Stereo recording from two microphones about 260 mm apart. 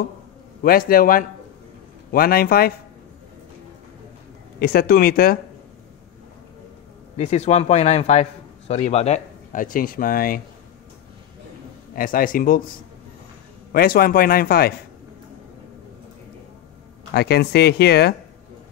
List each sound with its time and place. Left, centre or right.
0.6 s speech: left
4.6 s speech: left
7.2 s a man's voice: left
11.9 s speech: left
17.1 s speech: left